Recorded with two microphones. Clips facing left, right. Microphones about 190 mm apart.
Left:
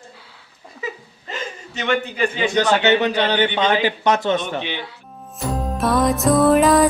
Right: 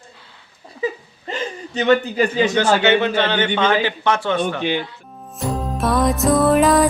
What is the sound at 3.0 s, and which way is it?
A man's voice, 15° left (ahead or behind).